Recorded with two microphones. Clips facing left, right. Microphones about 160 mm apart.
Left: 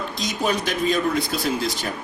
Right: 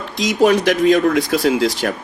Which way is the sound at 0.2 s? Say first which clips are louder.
Right 11 dB; 85° right.